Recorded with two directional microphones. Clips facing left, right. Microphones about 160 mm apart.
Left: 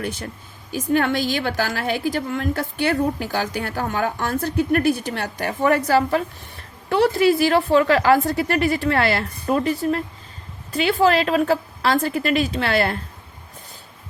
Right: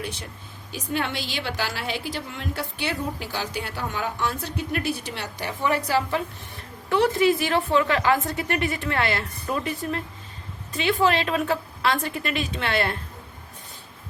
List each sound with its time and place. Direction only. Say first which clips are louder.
0.7 s a woman's voice: left 8 dB; 50° left (ahead or behind)